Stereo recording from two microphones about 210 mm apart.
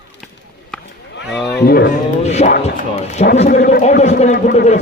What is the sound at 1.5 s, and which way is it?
Speech, 45° left (ahead or behind).